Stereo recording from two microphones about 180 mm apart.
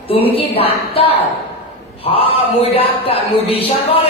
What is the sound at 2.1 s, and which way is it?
A man's voice, 30° left (ahead or behind).